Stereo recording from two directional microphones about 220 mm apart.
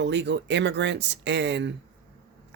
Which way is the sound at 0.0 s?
55° right (ahead or behind).